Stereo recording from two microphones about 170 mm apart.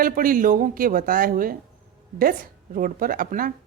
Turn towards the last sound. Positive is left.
turn(degrees=-55)  # may be behind; listen again after turning